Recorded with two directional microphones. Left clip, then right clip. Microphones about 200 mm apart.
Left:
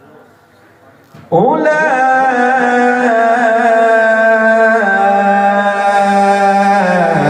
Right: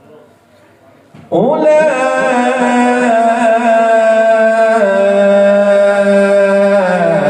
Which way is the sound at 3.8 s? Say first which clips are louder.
Even; 15° left (ahead or behind).